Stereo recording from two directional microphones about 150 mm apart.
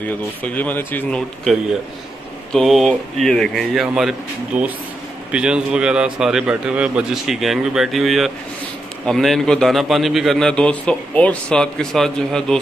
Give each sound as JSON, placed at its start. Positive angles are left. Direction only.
{"t": 0.4, "sound": "speech", "side_deg": 10}
{"t": 1.4, "sound": "a man's voice", "side_deg": 0}